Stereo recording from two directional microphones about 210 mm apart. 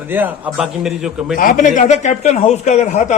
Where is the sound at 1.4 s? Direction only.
40° left (ahead or behind).